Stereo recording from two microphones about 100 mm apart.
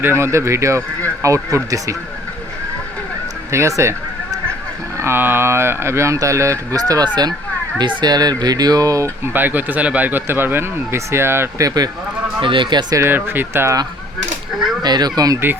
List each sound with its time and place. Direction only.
0.0 s speech: 25° right (ahead or behind)
3.5 s speech: 30° right (ahead or behind)
9.3 s speech: 20° right (ahead or behind); by 11.9 s 40° right (ahead or behind)
12.4 s speech: 55° right (ahead or behind)
13.0 s speech: 20° right (ahead or behind)
14.8 s speech: 45° right (ahead or behind)